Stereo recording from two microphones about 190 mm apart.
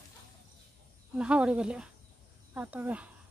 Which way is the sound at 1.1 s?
5° right (ahead or behind).